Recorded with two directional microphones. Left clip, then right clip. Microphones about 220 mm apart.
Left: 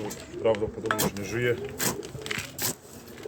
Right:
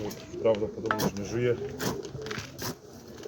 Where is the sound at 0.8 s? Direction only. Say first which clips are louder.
Left 1 dB; 15° left (ahead or behind).